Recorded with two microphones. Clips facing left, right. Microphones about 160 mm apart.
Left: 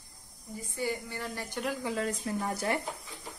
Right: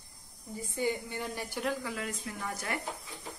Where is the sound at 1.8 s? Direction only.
30° left (ahead or behind).